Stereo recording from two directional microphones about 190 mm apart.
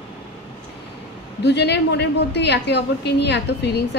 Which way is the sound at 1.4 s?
60° left (ahead or behind).